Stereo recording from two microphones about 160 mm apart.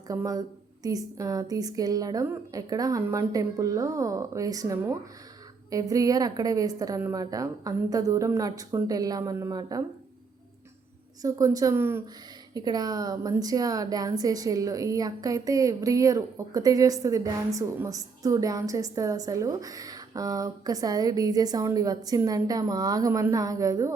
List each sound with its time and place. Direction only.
0.1 s a woman's voice: 20° right (ahead or behind)
11.2 s a woman's voice: 20° right (ahead or behind)